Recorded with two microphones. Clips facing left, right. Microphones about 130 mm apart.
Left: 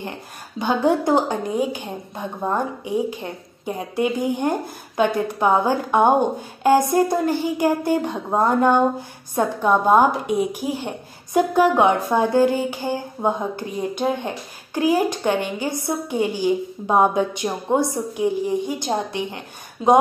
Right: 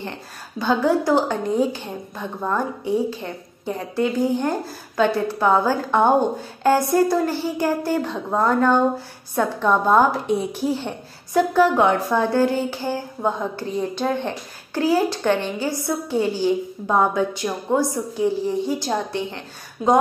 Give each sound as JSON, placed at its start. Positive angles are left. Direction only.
{"t": 0.6, "sound": "speech", "side_deg": 20}